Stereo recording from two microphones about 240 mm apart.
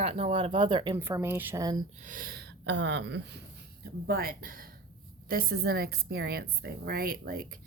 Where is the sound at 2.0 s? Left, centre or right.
Right.